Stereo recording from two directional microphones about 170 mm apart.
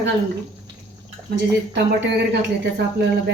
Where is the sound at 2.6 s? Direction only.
80° right.